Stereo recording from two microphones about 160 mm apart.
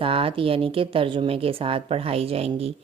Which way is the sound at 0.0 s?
35° right (ahead or behind).